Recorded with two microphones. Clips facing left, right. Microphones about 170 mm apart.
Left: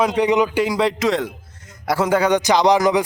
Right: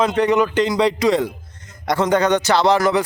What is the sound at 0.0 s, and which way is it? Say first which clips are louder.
Speech: even; 10° left (ahead or behind).